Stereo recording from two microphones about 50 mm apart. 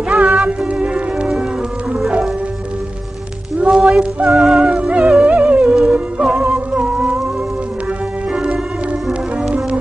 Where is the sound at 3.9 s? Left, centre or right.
Right.